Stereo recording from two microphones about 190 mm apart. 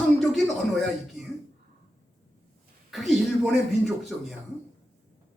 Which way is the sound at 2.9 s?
Centre (ahead or behind).